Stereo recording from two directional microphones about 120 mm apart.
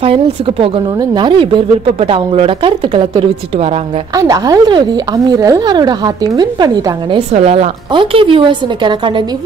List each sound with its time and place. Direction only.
0.0 s speech: 50° right (ahead or behind)
1.1 s speech: 40° right (ahead or behind)
4.2 s speech: 30° right (ahead or behind)
7.3 s a woman's voice: 60° right (ahead or behind)
7.9 s speech: 45° right (ahead or behind)